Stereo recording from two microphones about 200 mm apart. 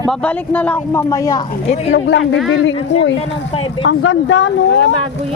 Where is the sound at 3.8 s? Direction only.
70° left (ahead or behind).